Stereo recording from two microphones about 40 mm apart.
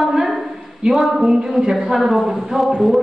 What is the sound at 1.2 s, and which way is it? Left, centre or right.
A woman's voice, centre.